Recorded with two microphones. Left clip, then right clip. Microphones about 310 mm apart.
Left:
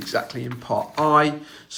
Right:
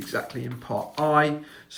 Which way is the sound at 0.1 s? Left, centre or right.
Centre.